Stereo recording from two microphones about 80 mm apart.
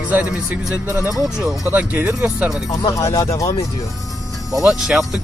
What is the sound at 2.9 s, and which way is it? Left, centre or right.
Speech, left.